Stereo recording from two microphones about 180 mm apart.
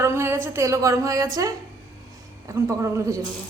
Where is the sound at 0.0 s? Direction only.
15° right (ahead or behind).